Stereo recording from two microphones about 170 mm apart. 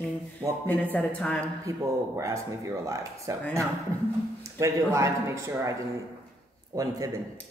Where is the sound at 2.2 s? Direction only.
20° right (ahead or behind).